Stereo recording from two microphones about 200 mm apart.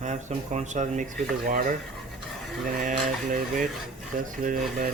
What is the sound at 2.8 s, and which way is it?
Speech, 40° right (ahead or behind).